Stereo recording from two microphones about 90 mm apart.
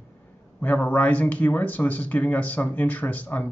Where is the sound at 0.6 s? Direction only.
20° left (ahead or behind).